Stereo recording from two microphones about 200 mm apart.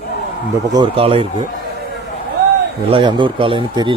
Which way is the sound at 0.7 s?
25° right (ahead or behind).